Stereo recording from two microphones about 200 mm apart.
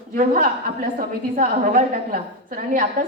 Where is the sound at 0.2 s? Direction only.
45° right (ahead or behind).